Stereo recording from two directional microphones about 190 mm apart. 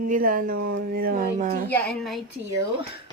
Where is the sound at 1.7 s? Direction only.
5° left (ahead or behind).